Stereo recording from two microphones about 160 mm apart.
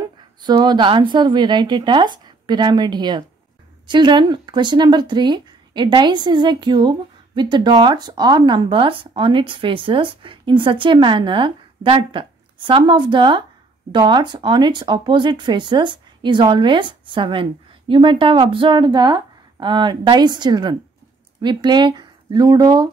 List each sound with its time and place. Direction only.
0.4 s speech: 25° right (ahead or behind)